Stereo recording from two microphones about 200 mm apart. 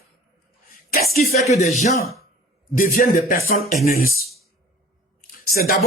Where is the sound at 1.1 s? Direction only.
50° left (ahead or behind).